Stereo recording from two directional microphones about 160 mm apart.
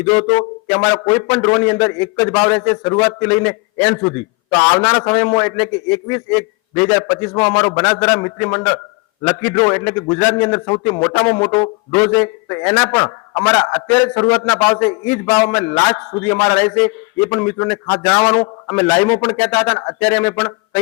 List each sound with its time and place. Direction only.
0.0 s a man's voice: 15° left (ahead or behind)